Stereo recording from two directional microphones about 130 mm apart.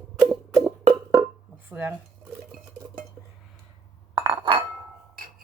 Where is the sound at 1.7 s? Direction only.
15° right (ahead or behind).